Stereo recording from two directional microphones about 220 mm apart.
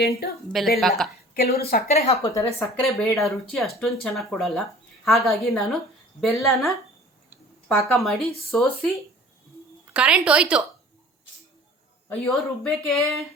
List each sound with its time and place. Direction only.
0.0 s a woman's voice: 45° left (ahead or behind)
0.8 s speech: centre (ahead or behind)
1.3 s a woman's voice: 45° left (ahead or behind)
1.9 s a woman's voice: 30° left (ahead or behind)
2.3 s speech: 10° left (ahead or behind)
3.0 s speech: centre (ahead or behind)
9.9 s speech: 5° right (ahead or behind)
12.0 s speech: 5° left (ahead or behind)